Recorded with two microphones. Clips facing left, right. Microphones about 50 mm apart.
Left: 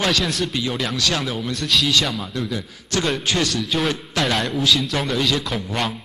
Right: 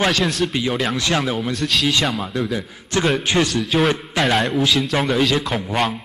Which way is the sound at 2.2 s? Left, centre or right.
Centre.